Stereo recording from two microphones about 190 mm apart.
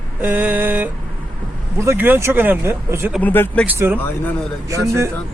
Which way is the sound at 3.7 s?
10° right (ahead or behind).